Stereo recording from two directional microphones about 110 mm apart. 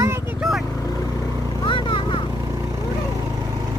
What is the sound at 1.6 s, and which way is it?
Vehicle, 50° left (ahead or behind).